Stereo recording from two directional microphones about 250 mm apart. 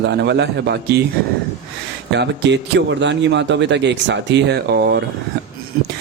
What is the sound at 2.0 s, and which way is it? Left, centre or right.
Speech, right.